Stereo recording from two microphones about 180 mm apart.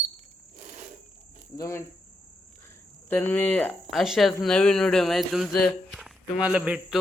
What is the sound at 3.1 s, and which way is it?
Speech, 10° left (ahead or behind).